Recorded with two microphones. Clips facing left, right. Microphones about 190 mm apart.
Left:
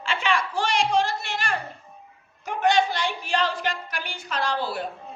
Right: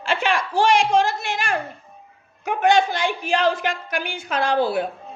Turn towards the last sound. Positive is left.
turn(degrees=-55)  # may be behind; listen again after turning